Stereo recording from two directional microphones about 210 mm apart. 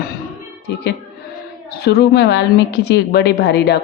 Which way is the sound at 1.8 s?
50° left (ahead or behind).